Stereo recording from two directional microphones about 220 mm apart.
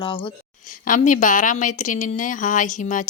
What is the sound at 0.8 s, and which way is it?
A woman's voice, 35° left (ahead or behind).